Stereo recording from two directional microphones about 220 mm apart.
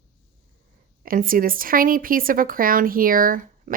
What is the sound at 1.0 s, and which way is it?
Speech, 40° right (ahead or behind).